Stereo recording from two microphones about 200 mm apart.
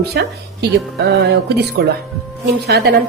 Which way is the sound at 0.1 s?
55° right (ahead or behind).